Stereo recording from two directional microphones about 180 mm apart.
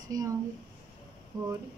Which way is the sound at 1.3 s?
20° right (ahead or behind).